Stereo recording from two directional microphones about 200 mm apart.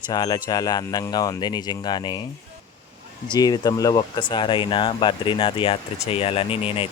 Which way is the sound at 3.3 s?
20° left (ahead or behind).